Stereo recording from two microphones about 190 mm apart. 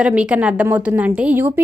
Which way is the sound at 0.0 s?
5° right (ahead or behind).